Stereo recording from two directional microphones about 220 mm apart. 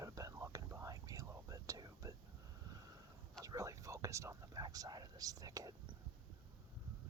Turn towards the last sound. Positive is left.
turn(degrees=-15)  # may be behind; listen again after turning